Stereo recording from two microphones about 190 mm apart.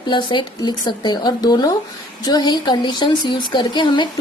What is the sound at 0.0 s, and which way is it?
A woman's voice, 25° left (ahead or behind).